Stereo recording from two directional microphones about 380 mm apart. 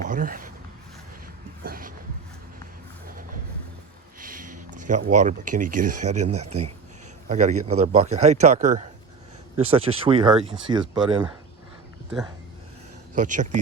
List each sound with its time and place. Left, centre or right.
0.0 s speech: right
1.6 s shuffle: right
4.2 s speech: right
13.1 s speech: centre